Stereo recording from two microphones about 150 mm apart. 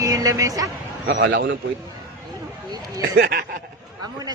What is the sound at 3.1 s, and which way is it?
Speech, 90° right.